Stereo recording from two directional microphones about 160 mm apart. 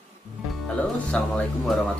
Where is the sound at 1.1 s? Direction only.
5° left (ahead or behind).